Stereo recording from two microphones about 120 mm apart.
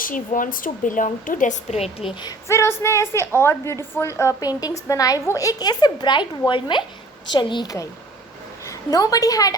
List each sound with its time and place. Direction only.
0.3 s a woman's voice: 90° left; by 2.0 s 65° left (ahead or behind)
2.5 s a woman's voice: 25° left (ahead or behind)